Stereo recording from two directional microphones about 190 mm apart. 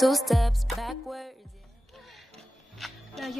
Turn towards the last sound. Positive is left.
turn(degrees=0)  # may be behind; listen again after turning